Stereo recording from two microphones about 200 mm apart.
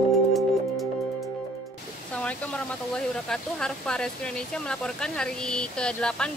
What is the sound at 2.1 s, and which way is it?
Speech, 5° left (ahead or behind).